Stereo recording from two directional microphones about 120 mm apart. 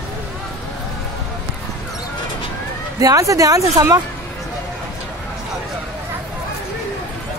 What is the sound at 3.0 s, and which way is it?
Speech, 30° right (ahead or behind).